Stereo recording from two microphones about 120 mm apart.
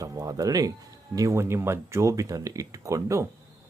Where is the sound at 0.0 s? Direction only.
30° right (ahead or behind).